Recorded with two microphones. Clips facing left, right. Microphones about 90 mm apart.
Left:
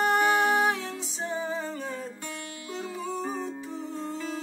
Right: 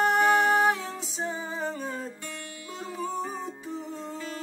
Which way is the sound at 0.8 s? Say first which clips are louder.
Right 1 dB; 20° right (ahead or behind).